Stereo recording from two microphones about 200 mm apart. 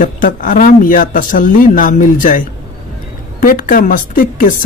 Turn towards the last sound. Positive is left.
turn(degrees=40)  # may be behind; listen again after turning